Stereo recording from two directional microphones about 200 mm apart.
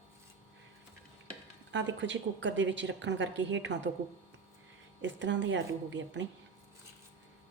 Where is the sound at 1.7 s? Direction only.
65° right (ahead or behind).